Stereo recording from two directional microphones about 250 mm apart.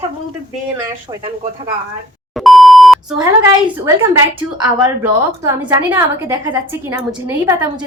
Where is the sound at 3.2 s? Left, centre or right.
Centre.